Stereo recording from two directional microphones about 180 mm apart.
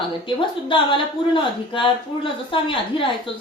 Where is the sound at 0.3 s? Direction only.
30° left (ahead or behind).